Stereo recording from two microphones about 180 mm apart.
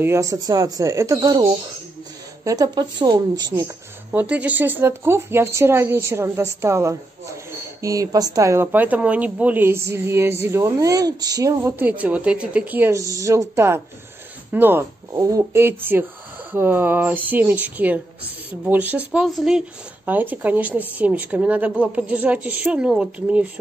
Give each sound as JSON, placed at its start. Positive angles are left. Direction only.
{"t": 0.0, "sound": "speech", "side_deg": -15}
{"t": 3.5, "sound": "speech", "side_deg": -10}